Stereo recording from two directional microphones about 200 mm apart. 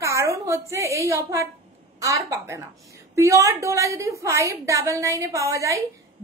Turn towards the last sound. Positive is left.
turn(degrees=-15)  # may be behind; listen again after turning